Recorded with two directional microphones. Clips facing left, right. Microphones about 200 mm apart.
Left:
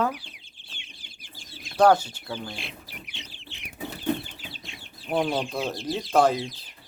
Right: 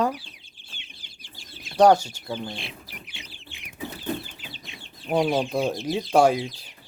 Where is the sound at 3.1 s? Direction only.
10° right (ahead or behind).